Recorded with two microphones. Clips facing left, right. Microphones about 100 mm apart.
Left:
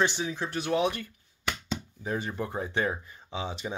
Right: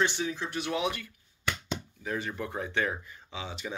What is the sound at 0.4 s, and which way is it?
Speech, 35° left (ahead or behind).